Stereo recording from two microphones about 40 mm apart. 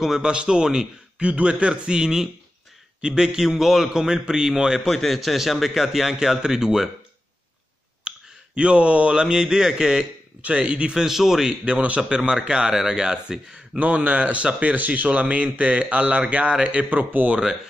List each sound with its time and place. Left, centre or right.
0.2 s speech: right
1.2 s a man's voice: right; by 3.9 s centre
3.9 s a man's voice: centre
4.8 s a man's voice: centre
8.1 s clicking: right
8.5 s speech: right
10.4 s a man's voice: right
11.0 s a man's voice: centre
11.4 s speech: right
13.7 s a man's voice: right